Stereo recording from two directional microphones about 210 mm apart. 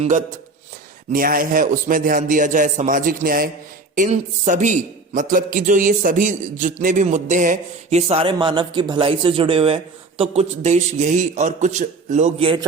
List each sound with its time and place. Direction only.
0.0 s a man's voice: 35° right (ahead or behind)